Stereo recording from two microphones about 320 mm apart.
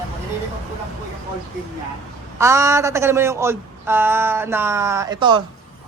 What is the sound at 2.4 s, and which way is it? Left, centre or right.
A woman's voice, centre.